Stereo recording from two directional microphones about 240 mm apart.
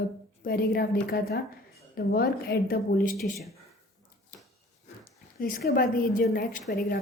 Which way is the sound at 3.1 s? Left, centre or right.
Centre.